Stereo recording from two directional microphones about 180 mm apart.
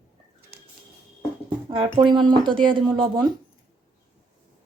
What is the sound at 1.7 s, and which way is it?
Speech, 25° right (ahead or behind).